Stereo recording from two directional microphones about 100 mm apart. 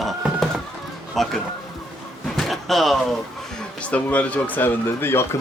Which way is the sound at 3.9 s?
15° left (ahead or behind).